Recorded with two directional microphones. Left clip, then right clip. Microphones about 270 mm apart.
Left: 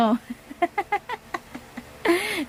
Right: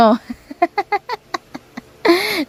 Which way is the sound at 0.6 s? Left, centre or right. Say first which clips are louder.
Right 7 dB; centre.